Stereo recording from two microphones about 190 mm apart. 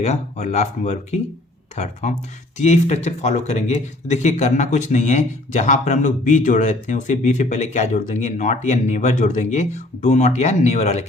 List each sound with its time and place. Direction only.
0.0 s speech: 35° left (ahead or behind)